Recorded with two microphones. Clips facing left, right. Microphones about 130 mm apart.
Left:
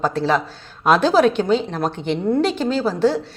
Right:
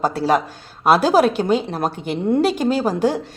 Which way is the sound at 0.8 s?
10° right (ahead or behind).